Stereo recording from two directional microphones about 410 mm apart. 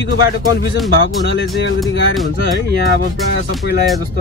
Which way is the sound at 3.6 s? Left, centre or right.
Left.